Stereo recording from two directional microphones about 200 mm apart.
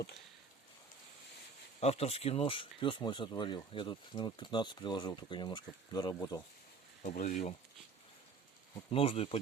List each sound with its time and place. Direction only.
1.8 s speech: 30° left (ahead or behind)
7.0 s speech: 40° left (ahead or behind)
8.9 s speech: 30° left (ahead or behind)